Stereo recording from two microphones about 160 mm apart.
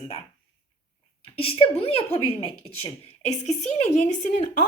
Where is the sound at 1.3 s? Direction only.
35° left (ahead or behind).